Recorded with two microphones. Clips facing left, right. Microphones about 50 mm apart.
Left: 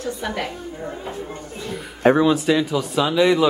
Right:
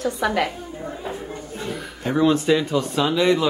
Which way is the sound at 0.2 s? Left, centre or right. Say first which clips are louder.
Right 8 dB; right.